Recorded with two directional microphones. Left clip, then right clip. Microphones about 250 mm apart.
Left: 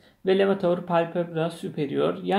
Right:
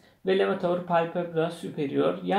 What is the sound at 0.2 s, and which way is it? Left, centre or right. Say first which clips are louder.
Speech: left 3 dB; left.